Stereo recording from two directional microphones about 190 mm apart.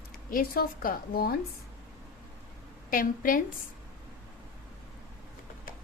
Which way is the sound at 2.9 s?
45° left (ahead or behind).